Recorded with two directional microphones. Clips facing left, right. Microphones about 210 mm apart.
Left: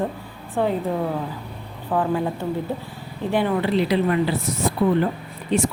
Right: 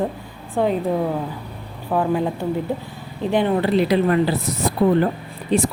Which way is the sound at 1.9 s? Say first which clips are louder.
Right 2 dB; 10° right (ahead or behind).